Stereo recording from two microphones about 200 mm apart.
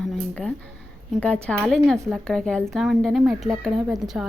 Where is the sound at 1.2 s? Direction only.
5° left (ahead or behind).